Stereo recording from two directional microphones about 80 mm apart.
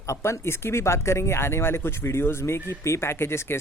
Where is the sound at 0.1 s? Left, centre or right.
Left.